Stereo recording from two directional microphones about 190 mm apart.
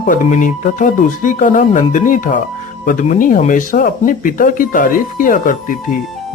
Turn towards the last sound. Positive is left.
turn(degrees=45)  # may be behind; listen again after turning